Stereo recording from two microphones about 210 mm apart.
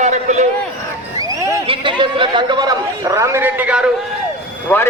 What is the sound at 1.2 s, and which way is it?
Speech, 15° right (ahead or behind).